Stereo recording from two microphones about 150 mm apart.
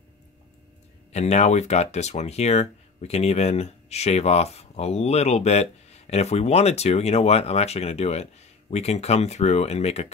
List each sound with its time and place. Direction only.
1.1 s speech: 50° left (ahead or behind)